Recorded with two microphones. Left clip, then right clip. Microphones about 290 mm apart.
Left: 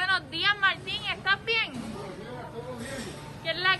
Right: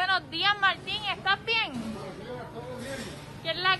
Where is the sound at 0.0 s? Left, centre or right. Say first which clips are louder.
Even; centre.